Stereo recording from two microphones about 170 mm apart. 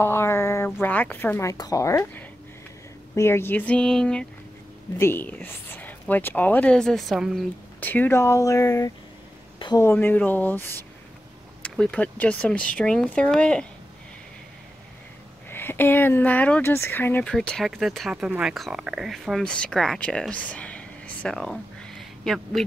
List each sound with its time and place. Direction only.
0.0 s a woman's voice: 15° left (ahead or behind)
7.8 s speech: 10° left (ahead or behind)
15.5 s speech: 10° left (ahead or behind)